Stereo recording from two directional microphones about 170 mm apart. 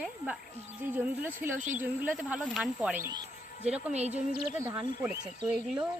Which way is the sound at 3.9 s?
40° right (ahead or behind).